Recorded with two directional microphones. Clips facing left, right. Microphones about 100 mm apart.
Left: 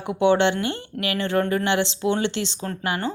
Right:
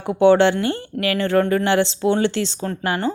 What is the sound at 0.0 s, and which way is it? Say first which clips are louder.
A woman's voice: right 5 dB; 35° right (ahead or behind).